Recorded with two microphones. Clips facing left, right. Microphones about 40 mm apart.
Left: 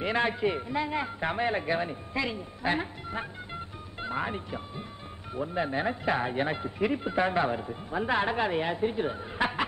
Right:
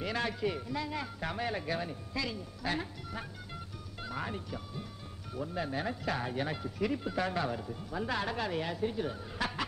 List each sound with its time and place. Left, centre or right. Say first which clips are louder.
0.0 s speech: left 6 dB; left